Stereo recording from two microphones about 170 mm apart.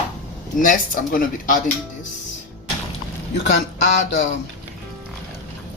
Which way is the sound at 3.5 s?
90° left.